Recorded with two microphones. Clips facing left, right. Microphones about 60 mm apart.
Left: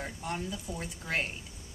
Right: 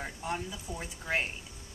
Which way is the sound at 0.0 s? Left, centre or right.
Centre.